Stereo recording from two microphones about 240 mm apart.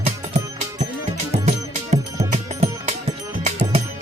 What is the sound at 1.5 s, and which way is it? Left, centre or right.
Music, right.